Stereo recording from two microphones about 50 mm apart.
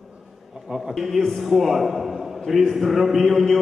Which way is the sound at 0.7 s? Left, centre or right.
Centre.